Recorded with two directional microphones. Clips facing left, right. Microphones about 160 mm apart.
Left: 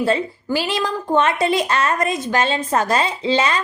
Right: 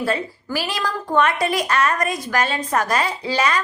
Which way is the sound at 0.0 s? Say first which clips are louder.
Left 4 dB; 25° left (ahead or behind).